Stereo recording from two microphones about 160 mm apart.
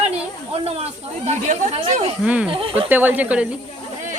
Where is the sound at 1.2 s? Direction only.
50° right (ahead or behind).